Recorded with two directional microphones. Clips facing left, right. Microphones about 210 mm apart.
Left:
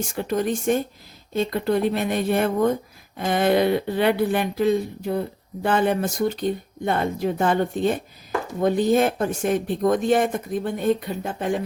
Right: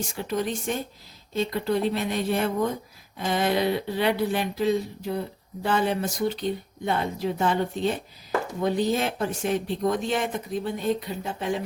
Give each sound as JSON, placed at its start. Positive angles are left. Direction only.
{"t": 0.2, "sound": "speech", "side_deg": 50}